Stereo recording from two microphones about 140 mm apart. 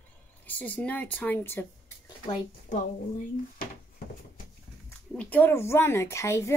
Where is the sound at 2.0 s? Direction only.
35° left (ahead or behind).